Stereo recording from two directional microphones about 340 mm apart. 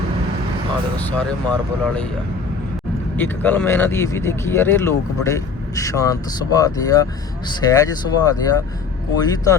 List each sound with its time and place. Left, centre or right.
1.3 s speech: centre
3.2 s speech: centre